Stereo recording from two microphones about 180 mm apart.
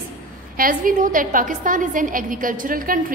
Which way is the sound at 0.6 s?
50° right (ahead or behind).